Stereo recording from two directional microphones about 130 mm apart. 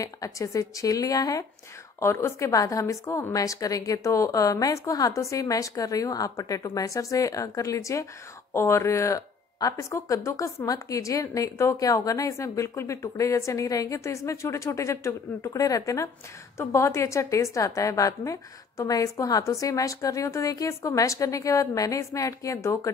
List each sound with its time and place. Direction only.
0.0 s speech: 25° left (ahead or behind)